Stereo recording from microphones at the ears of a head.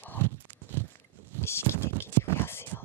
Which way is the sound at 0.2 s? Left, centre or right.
Right.